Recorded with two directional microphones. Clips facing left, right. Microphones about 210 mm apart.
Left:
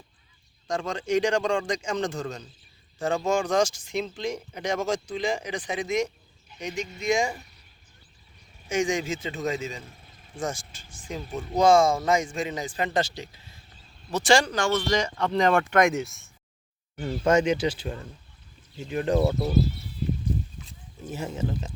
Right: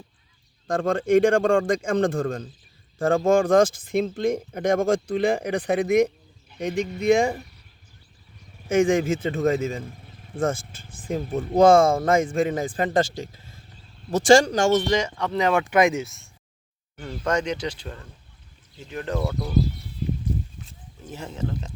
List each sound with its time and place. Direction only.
0.7 s speech: 55° right (ahead or behind)
8.6 s speech: 55° right (ahead or behind)
15.0 s speech: 5° right (ahead or behind); by 19.5 s 25° left (ahead or behind)
20.7 s wild animals: 10° left (ahead or behind)